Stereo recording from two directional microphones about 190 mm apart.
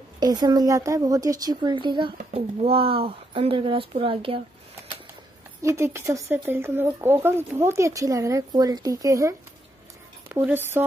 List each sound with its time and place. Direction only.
0.2 s a woman's voice: 20° right (ahead or behind)
5.6 s speech: 15° right (ahead or behind)